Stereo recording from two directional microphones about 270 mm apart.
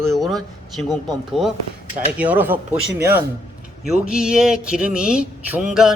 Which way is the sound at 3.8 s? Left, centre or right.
Centre.